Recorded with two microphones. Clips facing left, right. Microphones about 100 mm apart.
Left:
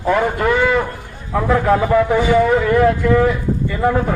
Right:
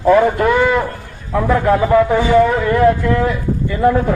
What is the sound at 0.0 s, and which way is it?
Speech, 15° right (ahead or behind).